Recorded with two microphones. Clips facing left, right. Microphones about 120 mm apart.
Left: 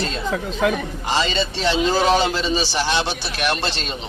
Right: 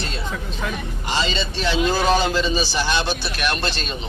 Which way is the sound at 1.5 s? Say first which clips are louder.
Left 2 dB; 80° left.